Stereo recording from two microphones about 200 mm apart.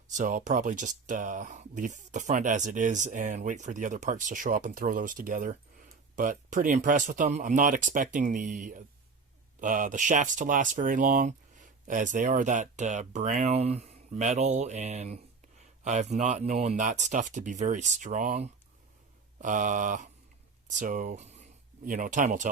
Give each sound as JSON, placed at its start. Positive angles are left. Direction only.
{"t": 0.2, "sound": "speech", "side_deg": -40}